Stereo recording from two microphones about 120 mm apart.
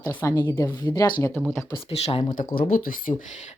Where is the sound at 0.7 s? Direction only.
35° left (ahead or behind).